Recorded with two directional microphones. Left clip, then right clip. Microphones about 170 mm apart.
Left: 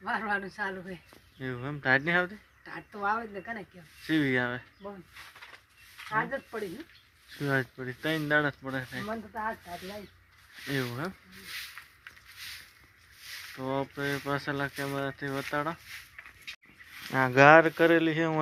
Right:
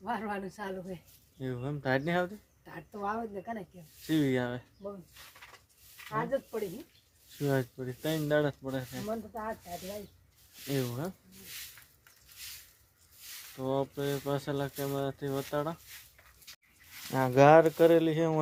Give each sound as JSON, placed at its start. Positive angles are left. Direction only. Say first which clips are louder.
{"t": 0.0, "sound": "speech", "louder": "left 5 dB", "side_deg": -15}
{"t": 1.4, "sound": "speech", "louder": "left 2 dB", "side_deg": 0}
{"t": 2.6, "sound": "speech", "louder": "left 5 dB", "side_deg": -15}
{"t": 6.1, "sound": "speech", "louder": "left 2 dB", "side_deg": 15}
{"t": 7.4, "sound": "speech", "louder": "left 2 dB", "side_deg": 5}
{"t": 10.7, "sound": "speech", "louder": "left 2 dB", "side_deg": 5}
{"t": 13.6, "sound": "speech", "louder": "right 1 dB", "side_deg": 10}
{"t": 14.0, "sound": "speech", "louder": "left 2 dB", "side_deg": 0}
{"t": 17.1, "sound": "speech", "louder": "left 3 dB", "side_deg": 0}